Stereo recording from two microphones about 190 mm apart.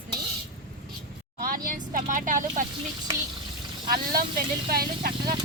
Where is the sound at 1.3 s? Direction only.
45° right (ahead or behind).